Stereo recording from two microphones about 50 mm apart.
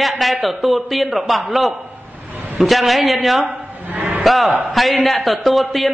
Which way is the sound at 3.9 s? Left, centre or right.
Right.